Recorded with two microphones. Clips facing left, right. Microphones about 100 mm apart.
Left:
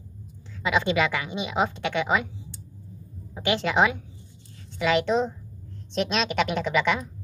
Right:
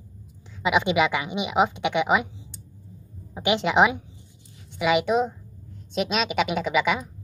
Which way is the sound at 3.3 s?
15° right (ahead or behind).